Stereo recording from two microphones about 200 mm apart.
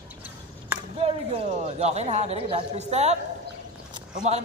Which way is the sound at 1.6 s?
35° right (ahead or behind).